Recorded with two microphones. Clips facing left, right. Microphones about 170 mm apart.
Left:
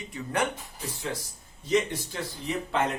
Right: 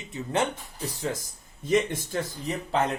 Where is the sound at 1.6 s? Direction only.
50° right (ahead or behind).